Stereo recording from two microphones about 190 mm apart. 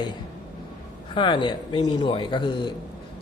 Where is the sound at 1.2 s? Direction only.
25° left (ahead or behind).